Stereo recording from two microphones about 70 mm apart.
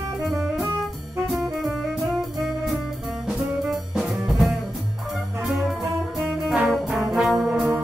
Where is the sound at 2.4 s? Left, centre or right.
Centre.